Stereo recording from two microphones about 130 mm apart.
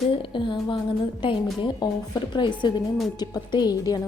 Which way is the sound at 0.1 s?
40° left (ahead or behind).